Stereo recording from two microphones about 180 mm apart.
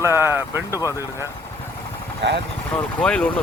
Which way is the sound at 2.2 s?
80° right.